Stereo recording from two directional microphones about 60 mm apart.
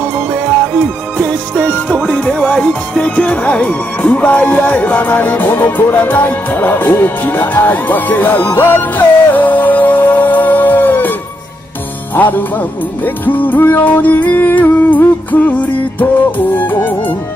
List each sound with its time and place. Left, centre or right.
2.0 s music: centre
3.2 s speech: left
12.2 s speech: left
13.0 s music: left